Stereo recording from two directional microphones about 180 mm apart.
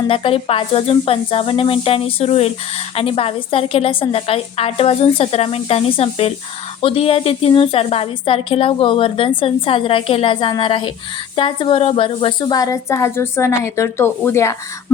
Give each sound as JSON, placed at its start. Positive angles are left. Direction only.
{"t": 0.1, "sound": "a woman's voice", "side_deg": 30}